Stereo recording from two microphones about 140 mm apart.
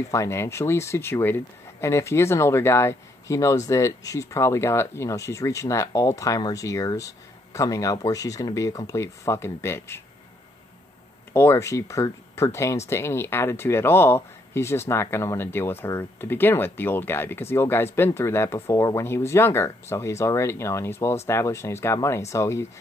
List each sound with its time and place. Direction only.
0.1 s speech: 20° left (ahead or behind)
11.3 s speech: 20° left (ahead or behind)